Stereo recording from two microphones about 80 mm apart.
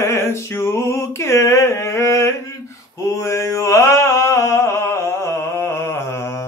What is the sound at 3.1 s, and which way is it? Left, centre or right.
Mantra, left.